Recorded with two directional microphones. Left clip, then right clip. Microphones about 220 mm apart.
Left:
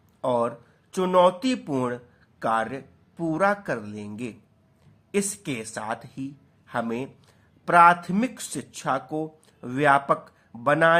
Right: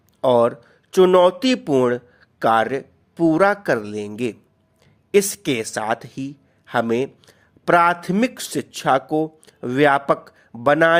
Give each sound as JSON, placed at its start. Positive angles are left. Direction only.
{"t": 0.2, "sound": "speech", "side_deg": -40}